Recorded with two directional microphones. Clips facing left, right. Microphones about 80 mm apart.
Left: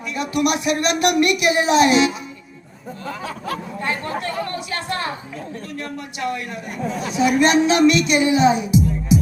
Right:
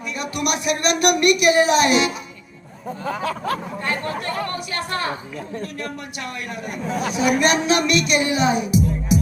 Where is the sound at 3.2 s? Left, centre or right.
Right.